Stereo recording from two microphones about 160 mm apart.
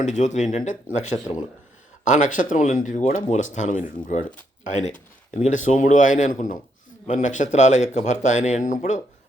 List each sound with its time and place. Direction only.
0.0 s speech: 50° left (ahead or behind)
5.3 s speech: 50° left (ahead or behind)